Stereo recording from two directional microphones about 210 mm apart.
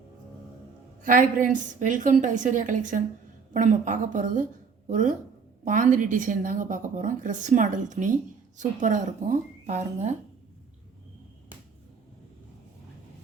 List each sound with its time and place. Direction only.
1.0 s a woman's voice: 40° right (ahead or behind)